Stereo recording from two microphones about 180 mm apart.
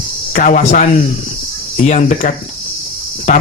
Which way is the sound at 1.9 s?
45° left (ahead or behind).